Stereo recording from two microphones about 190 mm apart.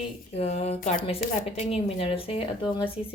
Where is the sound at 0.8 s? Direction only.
45° left (ahead or behind).